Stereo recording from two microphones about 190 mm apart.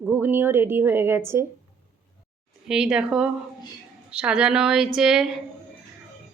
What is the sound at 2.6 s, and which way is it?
Speech, 5° right (ahead or behind).